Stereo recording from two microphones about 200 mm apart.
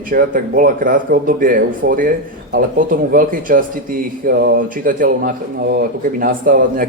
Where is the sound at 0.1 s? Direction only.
45° right (ahead or behind).